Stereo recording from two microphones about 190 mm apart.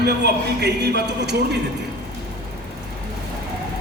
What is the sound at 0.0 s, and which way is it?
A man's voice, 60° right (ahead or behind).